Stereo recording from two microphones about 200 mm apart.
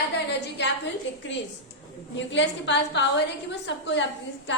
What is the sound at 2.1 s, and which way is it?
Speech, 65° left (ahead or behind).